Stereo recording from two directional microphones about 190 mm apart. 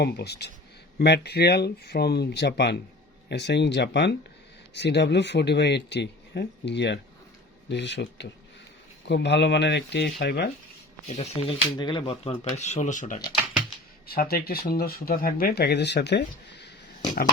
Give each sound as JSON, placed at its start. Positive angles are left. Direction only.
{"t": 0.0, "sound": "speech", "side_deg": 60}
{"t": 11.1, "sound": "speech", "side_deg": 35}
{"t": 11.8, "sound": "speech", "side_deg": 25}